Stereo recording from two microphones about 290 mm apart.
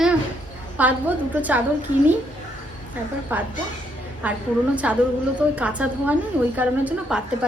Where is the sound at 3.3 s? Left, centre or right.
Centre.